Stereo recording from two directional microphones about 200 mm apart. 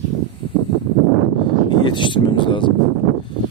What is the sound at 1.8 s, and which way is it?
Speech, 25° left (ahead or behind).